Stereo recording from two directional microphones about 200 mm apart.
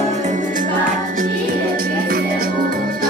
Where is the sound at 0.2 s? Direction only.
40° right (ahead or behind).